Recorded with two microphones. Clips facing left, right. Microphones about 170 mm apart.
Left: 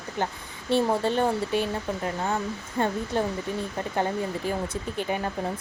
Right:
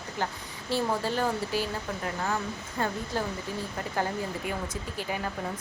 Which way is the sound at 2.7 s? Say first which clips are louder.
Left 5 dB; 25° left (ahead or behind).